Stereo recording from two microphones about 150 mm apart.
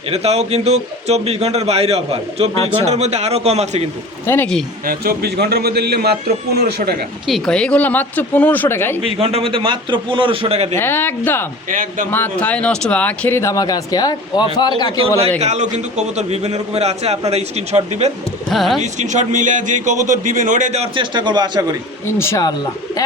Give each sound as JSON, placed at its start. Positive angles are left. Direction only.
{"t": 0.1, "sound": "speech", "side_deg": -45}
{"t": 4.3, "sound": "speech", "side_deg": 15}
{"t": 4.9, "sound": "a man's voice", "side_deg": -85}
{"t": 7.3, "sound": "speech", "side_deg": 0}
{"t": 9.0, "sound": "a man's voice", "side_deg": -40}
{"t": 10.8, "sound": "speech", "side_deg": 15}
{"t": 11.7, "sound": "a man's voice", "side_deg": -65}
{"t": 12.1, "sound": "speech", "side_deg": 10}
{"t": 15.4, "sound": "speech", "side_deg": -50}
{"t": 18.5, "sound": "speech", "side_deg": 0}
{"t": 18.8, "sound": "speech", "side_deg": -55}
{"t": 22.0, "sound": "speech", "side_deg": 15}